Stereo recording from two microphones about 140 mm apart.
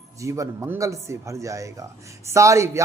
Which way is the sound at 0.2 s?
20° right (ahead or behind).